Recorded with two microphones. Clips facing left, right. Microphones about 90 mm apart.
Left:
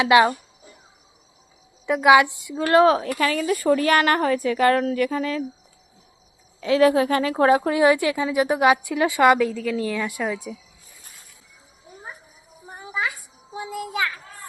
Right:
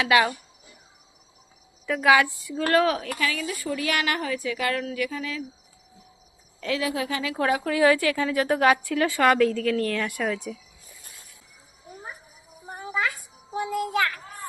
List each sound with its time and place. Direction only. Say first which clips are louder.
0.0 s a woman's voice: left 5 dB; 25° left (ahead or behind)
1.9 s a woman's voice: left 4 dB; 20° left (ahead or behind); by 5.5 s 40° left (ahead or behind)
6.7 s a woman's voice: left 12 dB; 35° left (ahead or behind); by 10.6 s 10° left (ahead or behind)
12.8 s a sound: even; 10° left (ahead or behind)